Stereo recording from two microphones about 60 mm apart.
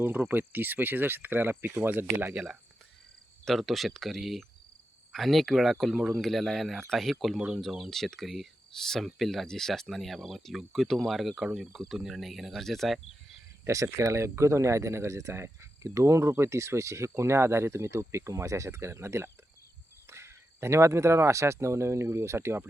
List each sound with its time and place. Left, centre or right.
0.0 s speech: right
2.3 s speech: centre
3.4 s speech: centre
13.7 s speech: right